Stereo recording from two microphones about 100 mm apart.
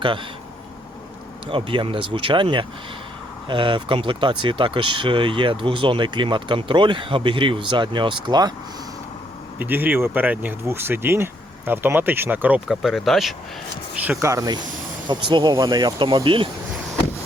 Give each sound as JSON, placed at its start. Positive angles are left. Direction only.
{"t": 1.5, "sound": "speech", "side_deg": -60}
{"t": 9.6, "sound": "speech", "side_deg": -20}
{"t": 12.6, "sound": "speech", "side_deg": 0}
{"t": 14.2, "sound": "speech", "side_deg": -30}
{"t": 15.0, "sound": "speech", "side_deg": -50}
{"t": 15.5, "sound": "speech", "side_deg": -40}